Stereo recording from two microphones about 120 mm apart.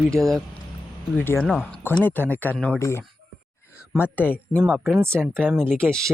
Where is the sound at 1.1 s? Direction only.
20° left (ahead or behind).